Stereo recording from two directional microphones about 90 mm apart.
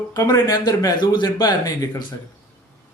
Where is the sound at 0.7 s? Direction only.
55° left (ahead or behind).